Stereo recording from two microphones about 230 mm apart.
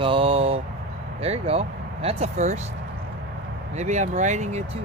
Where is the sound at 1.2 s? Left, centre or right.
Right.